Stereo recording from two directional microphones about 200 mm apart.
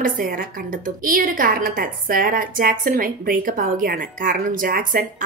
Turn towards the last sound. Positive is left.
turn(degrees=-45)  # may be behind; listen again after turning